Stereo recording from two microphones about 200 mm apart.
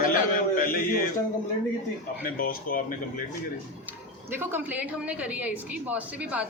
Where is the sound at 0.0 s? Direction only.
45° left (ahead or behind).